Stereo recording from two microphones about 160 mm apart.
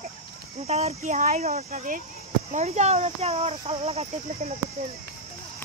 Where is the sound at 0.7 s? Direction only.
40° right (ahead or behind).